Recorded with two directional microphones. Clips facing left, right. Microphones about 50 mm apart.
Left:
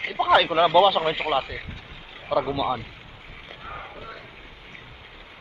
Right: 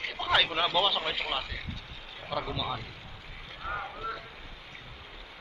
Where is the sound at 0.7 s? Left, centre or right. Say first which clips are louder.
Left 11 dB; centre.